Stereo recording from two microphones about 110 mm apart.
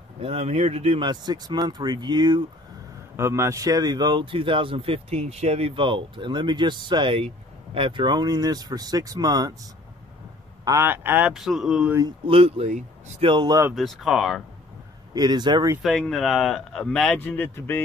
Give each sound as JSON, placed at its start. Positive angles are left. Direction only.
{"t": 0.2, "sound": "speech", "side_deg": -65}
{"t": 1.0, "sound": "speech", "side_deg": -40}
{"t": 3.2, "sound": "speech", "side_deg": -25}
{"t": 10.6, "sound": "a sound", "side_deg": -30}
{"t": 10.9, "sound": "speech", "side_deg": -15}
{"t": 11.3, "sound": "speech", "side_deg": -5}
{"t": 12.3, "sound": "speech", "side_deg": -65}
{"t": 13.2, "sound": "speech", "side_deg": -45}
{"t": 13.7, "sound": "speech", "side_deg": 0}
{"t": 15.1, "sound": "speech", "side_deg": -40}
{"t": 15.8, "sound": "speech", "side_deg": 0}